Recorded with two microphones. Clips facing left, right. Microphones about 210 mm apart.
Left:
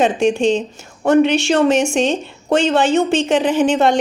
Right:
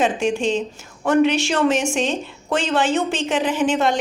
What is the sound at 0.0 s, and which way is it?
A woman's voice, 25° left (ahead or behind).